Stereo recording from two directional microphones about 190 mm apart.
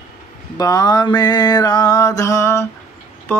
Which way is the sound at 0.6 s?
20° left (ahead or behind).